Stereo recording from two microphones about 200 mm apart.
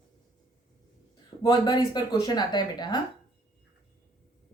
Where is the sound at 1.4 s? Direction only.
20° left (ahead or behind).